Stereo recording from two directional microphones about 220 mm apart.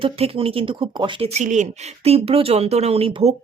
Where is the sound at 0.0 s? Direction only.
25° right (ahead or behind).